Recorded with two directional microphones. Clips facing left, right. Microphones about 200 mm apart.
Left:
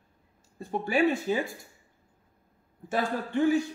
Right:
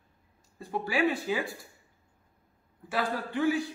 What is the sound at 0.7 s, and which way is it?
Speech, 25° left (ahead or behind).